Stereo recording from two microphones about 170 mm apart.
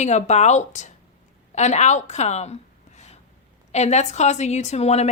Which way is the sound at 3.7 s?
40° left (ahead or behind).